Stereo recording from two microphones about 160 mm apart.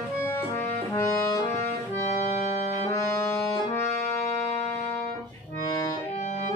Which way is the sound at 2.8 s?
15° left (ahead or behind).